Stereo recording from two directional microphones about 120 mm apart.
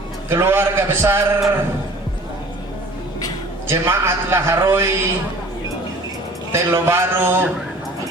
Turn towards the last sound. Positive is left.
turn(degrees=-20)  # may be behind; listen again after turning